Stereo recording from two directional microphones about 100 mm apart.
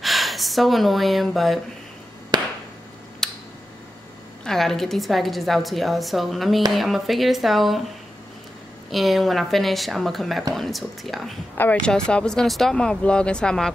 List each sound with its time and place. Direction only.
0.0 s speech: centre (ahead or behind)
2.3 s chop: 45° right (ahead or behind)
3.2 s a sound: 5° left (ahead or behind)
4.5 s a woman's voice: 5° left (ahead or behind)
8.9 s a woman's voice: centre (ahead or behind)